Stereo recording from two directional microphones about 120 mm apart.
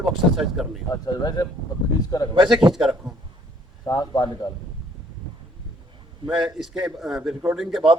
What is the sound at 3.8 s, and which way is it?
Speech, 30° left (ahead or behind).